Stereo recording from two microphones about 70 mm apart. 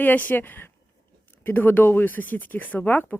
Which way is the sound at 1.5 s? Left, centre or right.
Left.